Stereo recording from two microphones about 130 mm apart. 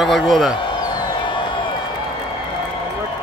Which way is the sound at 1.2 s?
40° left (ahead or behind).